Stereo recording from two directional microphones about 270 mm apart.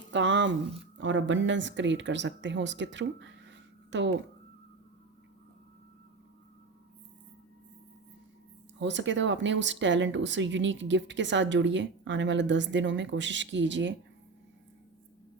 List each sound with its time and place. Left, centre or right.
0.1 s speech: right
8.8 s speech: right